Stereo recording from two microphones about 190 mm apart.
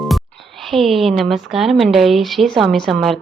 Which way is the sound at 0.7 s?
Centre (ahead or behind).